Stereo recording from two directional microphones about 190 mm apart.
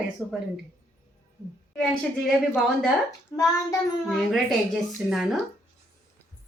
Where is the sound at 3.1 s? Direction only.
20° left (ahead or behind).